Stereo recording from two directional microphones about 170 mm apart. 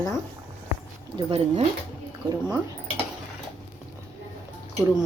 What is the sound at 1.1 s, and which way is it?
Speech, 35° right (ahead or behind).